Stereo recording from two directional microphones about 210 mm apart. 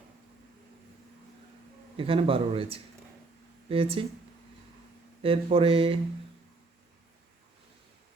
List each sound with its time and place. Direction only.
2.0 s speech: 25° right (ahead or behind)
5.2 s speech: 25° right (ahead or behind)